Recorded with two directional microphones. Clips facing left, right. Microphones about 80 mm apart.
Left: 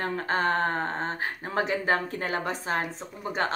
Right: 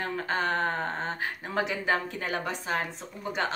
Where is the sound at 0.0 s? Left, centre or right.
Left.